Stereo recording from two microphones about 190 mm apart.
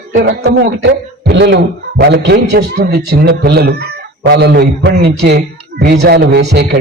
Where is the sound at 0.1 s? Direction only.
55° right (ahead or behind).